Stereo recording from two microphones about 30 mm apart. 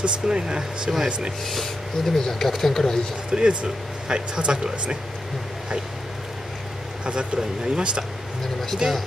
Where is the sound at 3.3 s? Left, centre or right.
Right.